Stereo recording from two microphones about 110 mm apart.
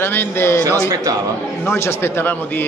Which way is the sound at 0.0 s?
20° left (ahead or behind).